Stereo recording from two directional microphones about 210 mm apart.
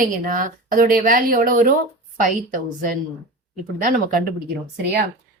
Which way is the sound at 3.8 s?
40° right (ahead or behind).